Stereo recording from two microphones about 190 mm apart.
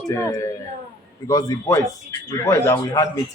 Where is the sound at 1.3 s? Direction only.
20° left (ahead or behind).